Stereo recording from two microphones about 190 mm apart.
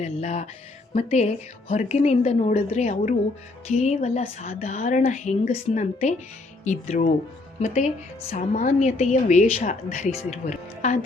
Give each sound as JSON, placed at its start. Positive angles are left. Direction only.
{"t": 0.0, "sound": "a woman's voice", "side_deg": 35}